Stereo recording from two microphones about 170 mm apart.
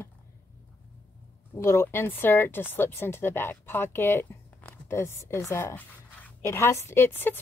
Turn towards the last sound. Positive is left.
turn(degrees=15)  # may be behind; listen again after turning